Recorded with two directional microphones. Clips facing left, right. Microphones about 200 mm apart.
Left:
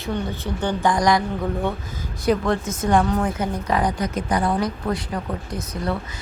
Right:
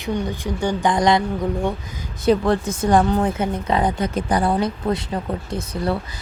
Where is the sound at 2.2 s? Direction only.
30° right (ahead or behind).